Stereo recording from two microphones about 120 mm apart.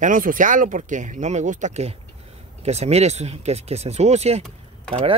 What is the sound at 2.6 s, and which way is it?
Speech, 60° right (ahead or behind).